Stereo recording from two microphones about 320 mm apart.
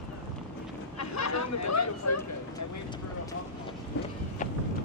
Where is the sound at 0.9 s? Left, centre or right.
Left.